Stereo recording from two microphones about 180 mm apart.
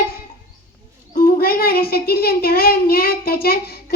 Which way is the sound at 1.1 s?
55° left (ahead or behind).